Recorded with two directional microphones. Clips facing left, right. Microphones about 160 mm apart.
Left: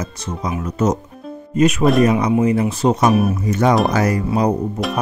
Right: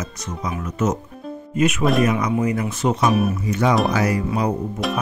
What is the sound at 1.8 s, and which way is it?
Speech, centre (ahead or behind).